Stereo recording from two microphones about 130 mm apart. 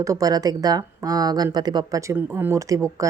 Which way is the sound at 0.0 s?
25° right (ahead or behind).